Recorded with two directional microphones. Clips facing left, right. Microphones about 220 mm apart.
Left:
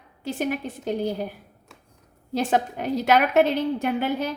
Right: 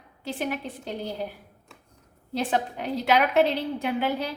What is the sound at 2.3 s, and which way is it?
A woman's voice, 45° left (ahead or behind).